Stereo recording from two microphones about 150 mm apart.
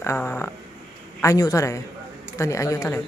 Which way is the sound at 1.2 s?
25° left (ahead or behind).